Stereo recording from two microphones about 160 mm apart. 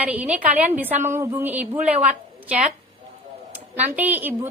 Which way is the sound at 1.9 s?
50° right (ahead or behind).